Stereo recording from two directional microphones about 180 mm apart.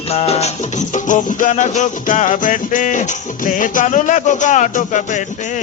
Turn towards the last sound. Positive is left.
turn(degrees=45)  # may be behind; listen again after turning